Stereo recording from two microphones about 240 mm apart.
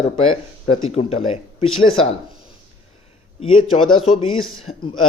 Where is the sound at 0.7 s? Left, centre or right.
Left.